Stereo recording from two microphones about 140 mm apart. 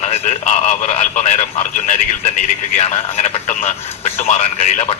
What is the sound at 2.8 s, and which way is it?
A man's voice, 50° left (ahead or behind).